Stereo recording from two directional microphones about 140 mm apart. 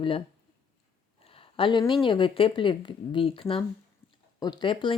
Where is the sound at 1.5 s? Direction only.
35° left (ahead or behind).